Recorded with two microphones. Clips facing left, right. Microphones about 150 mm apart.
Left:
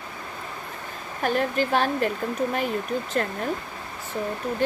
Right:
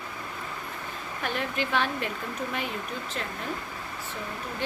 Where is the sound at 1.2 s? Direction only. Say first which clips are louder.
Left 7 dB; 40° left (ahead or behind).